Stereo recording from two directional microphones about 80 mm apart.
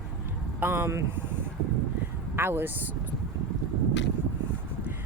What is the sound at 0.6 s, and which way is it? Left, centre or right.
Speech, right.